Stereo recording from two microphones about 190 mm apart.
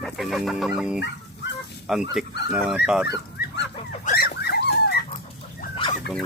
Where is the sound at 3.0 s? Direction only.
65° left (ahead or behind).